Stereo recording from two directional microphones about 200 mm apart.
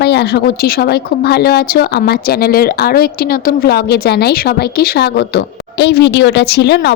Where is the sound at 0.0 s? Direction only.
55° left (ahead or behind).